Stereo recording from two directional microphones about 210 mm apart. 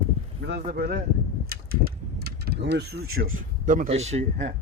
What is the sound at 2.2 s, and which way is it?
A man's voice, 50° right (ahead or behind).